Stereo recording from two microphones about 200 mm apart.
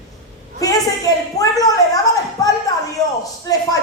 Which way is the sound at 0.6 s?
15° left (ahead or behind).